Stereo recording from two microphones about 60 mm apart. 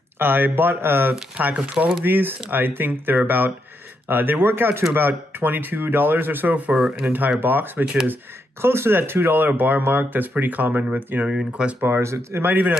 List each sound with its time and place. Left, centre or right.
0.2 s speech: right
1.3 s speech: right
2.5 s speech: right
11.3 s speech: centre
12.0 s speech: right
12.4 s speech: right